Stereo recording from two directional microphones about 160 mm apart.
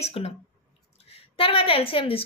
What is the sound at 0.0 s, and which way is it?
A woman's voice, 40° left (ahead or behind).